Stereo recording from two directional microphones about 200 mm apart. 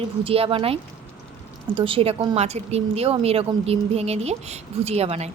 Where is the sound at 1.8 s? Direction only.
25° right (ahead or behind).